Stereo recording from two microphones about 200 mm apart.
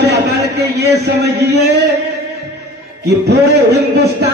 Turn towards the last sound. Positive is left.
turn(degrees=-55)  # may be behind; listen again after turning